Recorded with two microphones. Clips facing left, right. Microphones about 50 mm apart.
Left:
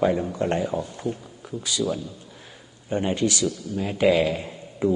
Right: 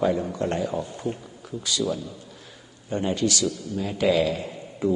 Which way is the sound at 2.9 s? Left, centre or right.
Left.